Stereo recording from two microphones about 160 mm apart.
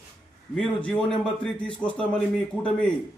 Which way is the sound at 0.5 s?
5° left (ahead or behind).